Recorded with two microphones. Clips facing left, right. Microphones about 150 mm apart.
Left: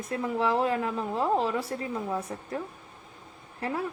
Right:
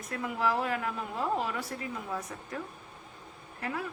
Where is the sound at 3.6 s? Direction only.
30° left (ahead or behind).